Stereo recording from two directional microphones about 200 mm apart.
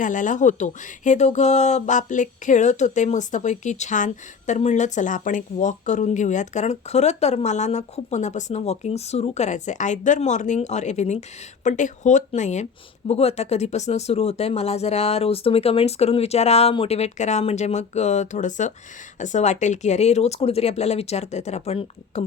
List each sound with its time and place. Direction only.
0.0 s speech: 40° left (ahead or behind)